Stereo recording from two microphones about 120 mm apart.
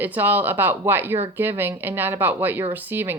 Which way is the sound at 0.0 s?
15° right (ahead or behind).